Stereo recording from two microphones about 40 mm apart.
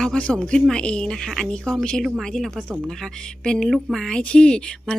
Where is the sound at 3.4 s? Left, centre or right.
Left.